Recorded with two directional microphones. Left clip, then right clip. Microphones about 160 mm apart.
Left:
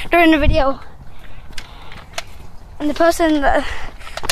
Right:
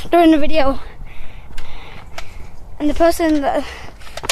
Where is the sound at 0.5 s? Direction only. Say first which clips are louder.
Even; 40° right (ahead or behind).